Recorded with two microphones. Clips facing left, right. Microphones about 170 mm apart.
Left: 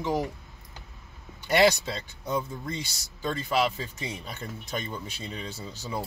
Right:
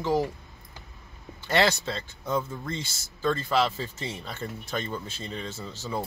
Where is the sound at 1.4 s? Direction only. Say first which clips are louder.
Left 2 dB; 10° left (ahead or behind).